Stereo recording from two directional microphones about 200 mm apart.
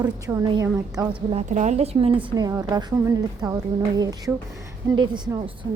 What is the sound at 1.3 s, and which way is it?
Speech, 35° right (ahead or behind).